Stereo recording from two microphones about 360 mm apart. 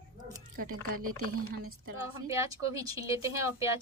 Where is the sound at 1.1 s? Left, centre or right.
Right.